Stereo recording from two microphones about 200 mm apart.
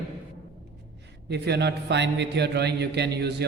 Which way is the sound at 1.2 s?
55° right (ahead or behind).